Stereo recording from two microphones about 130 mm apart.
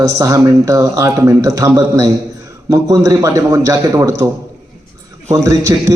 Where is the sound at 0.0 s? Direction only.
25° right (ahead or behind).